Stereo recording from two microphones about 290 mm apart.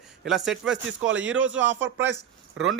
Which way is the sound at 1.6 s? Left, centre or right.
Right.